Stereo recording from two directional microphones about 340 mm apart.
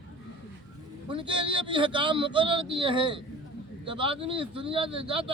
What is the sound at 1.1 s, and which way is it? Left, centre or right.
Speech, centre.